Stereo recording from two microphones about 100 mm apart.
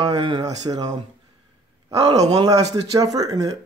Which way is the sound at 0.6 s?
40° right (ahead or behind).